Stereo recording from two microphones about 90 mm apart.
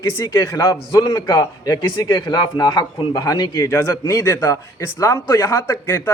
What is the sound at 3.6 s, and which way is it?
Speech, 30° left (ahead or behind).